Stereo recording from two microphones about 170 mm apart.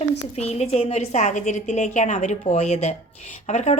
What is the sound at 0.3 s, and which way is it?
Speech, 40° left (ahead or behind).